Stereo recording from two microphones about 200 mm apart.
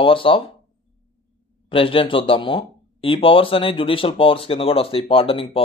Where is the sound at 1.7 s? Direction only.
25° left (ahead or behind).